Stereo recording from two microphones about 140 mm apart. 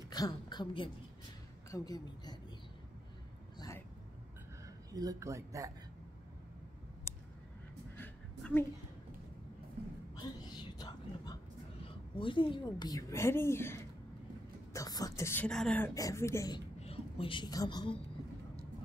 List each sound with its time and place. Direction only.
0.1 s a woman's voice: 30° left (ahead or behind)
3.5 s vehicle: 25° left (ahead or behind)
4.9 s speech: 25° right (ahead or behind)
7.9 s a sound: 15° left (ahead or behind)
10.5 s a sound: 30° left (ahead or behind)
12.2 s a woman's voice: 35° left (ahead or behind); by 15.4 s 20° left (ahead or behind)
15.4 s speech: 5° left (ahead or behind)
15.9 s a woman's voice: 25° left (ahead or behind)
16.8 s a woman's voice: 40° left (ahead or behind)